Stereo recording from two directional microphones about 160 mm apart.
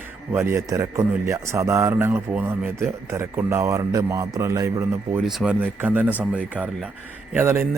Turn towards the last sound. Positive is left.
turn(degrees=-15)  # may be behind; listen again after turning